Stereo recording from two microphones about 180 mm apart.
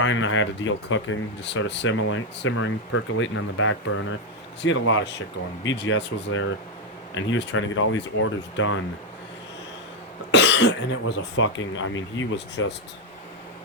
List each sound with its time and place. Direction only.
0.0 s speech: 90° left
10.3 s speech: 75° left (ahead or behind)